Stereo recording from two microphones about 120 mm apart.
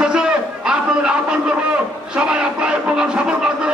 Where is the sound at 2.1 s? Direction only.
5° right (ahead or behind).